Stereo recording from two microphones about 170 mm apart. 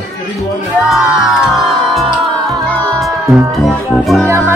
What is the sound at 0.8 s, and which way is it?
Music, centre (ahead or behind).